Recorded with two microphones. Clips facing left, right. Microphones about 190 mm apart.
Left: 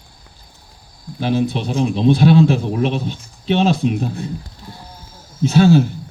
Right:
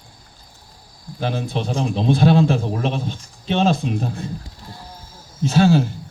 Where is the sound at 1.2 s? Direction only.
40° right (ahead or behind).